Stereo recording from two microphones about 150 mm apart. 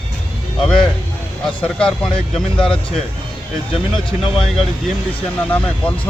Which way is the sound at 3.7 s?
35° left (ahead or behind).